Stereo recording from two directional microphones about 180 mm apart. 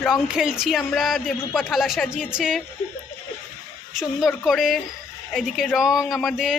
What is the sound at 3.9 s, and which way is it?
Speech, centre (ahead or behind).